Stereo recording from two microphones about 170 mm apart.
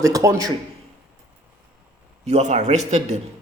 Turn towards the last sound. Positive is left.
turn(degrees=-40)  # may be behind; listen again after turning